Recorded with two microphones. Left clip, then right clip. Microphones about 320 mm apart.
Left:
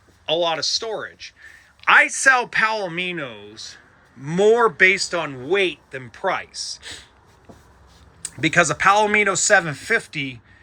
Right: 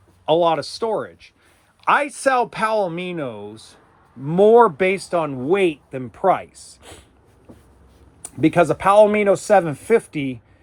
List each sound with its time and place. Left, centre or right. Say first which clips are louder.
0.3 s speech: right 3 dB; centre
8.2 s speech: right 1 dB; centre